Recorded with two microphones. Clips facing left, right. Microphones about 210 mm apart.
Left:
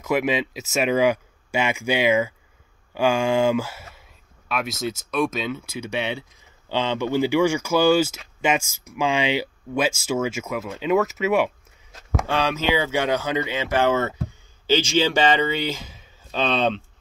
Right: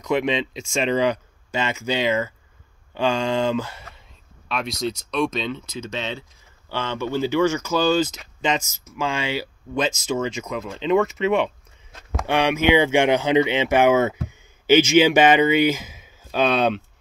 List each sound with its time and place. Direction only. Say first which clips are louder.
0.0 s speech: even; 5° left (ahead or behind)
12.3 s speech: right 5 dB; 15° right (ahead or behind)
13.8 s speech: right 4 dB; 10° right (ahead or behind)